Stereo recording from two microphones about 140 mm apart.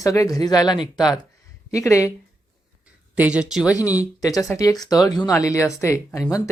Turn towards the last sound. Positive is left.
turn(degrees=20)  # may be behind; listen again after turning